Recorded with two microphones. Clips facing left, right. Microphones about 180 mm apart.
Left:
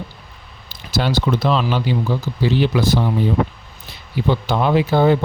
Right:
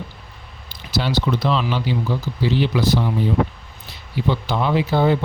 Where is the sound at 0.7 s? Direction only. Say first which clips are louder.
Left 2 dB; 45° left (ahead or behind).